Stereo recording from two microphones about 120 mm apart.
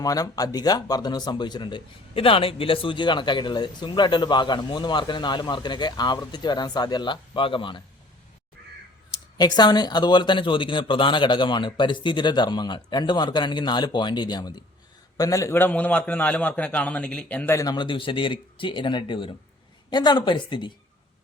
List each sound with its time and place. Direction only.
0.0 s speech: 30° left (ahead or behind)
9.4 s a man's voice: 35° left (ahead or behind); by 17.5 s 10° left (ahead or behind)
17.5 s speech: 25° left (ahead or behind)
17.7 s speech: 45° left (ahead or behind)